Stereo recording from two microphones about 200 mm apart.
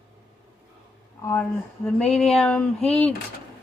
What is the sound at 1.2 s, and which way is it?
Speech, 10° left (ahead or behind).